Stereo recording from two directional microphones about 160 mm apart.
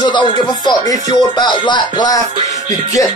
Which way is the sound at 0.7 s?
25° left (ahead or behind).